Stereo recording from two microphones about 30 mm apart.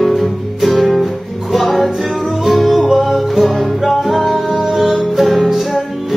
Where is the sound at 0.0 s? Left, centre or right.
Centre.